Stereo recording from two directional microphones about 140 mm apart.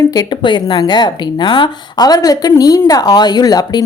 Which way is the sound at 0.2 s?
35° left (ahead or behind).